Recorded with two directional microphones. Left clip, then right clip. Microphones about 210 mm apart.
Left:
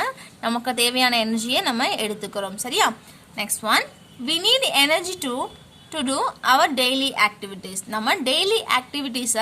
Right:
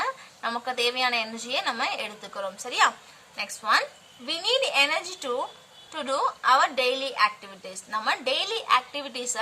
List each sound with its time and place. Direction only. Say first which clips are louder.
0.0 s a woman's voice: left 4 dB; 50° left (ahead or behind)